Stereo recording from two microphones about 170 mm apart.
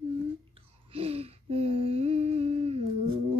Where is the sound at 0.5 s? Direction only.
35° right (ahead or behind).